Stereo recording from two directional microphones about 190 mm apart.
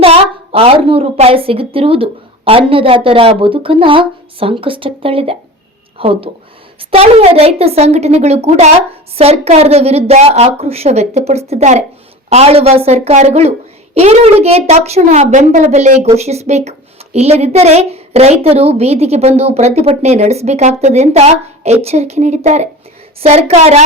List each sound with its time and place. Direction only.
0.0 s a woman's voice: 30° right (ahead or behind)